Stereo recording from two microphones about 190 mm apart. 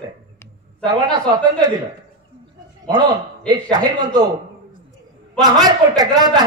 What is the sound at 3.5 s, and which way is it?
Speech, 20° right (ahead or behind).